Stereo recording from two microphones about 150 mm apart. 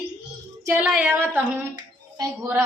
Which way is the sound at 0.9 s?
10° right (ahead or behind).